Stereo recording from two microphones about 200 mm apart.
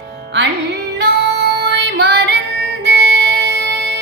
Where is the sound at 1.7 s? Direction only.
60° right (ahead or behind).